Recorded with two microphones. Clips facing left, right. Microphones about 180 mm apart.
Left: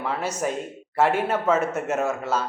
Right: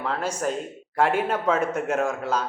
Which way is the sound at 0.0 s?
10° left (ahead or behind).